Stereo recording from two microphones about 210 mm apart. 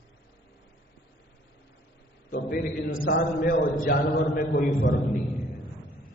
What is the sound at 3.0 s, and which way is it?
A man's voice, 40° left (ahead or behind).